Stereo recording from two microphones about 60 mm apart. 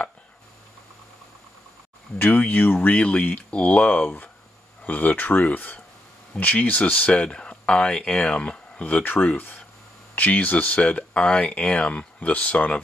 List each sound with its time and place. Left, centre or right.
2.1 s speech: left
2.9 s speech: left